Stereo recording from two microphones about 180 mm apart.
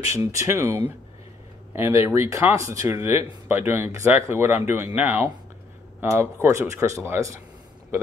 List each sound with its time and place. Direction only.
0.1 s speech: 15° right (ahead or behind)